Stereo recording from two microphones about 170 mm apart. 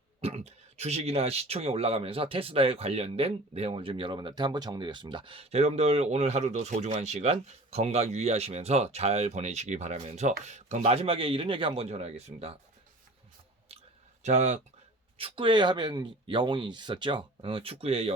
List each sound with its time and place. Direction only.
0.2 s speech: 35° right (ahead or behind)
14.2 s speech: 45° right (ahead or behind)
15.2 s speech: 30° right (ahead or behind)